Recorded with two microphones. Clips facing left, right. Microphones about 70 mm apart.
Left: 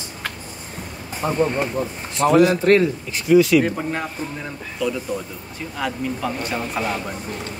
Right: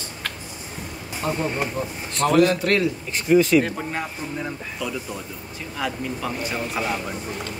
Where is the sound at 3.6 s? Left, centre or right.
Centre.